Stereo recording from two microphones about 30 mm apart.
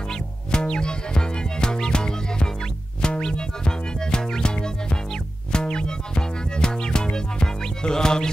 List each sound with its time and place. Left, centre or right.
0.1 s music: left